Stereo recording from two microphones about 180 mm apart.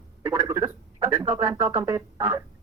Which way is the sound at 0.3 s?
10° right (ahead or behind).